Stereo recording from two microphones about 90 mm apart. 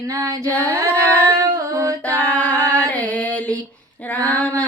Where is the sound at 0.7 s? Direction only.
35° right (ahead or behind).